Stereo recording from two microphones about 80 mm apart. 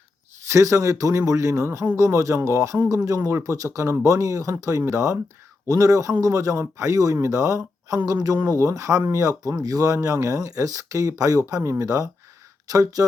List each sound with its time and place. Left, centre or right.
0.4 s a man's voice: right